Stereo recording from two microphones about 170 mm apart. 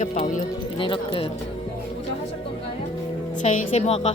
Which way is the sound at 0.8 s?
30° left (ahead or behind).